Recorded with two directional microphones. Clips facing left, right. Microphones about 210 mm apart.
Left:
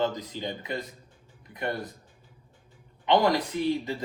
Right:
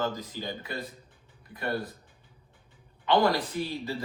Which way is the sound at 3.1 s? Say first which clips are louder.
Left 1 dB; 20° left (ahead or behind).